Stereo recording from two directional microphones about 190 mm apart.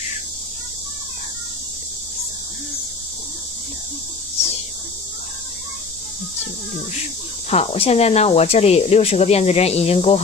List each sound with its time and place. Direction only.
7.4 s speech: 35° left (ahead or behind)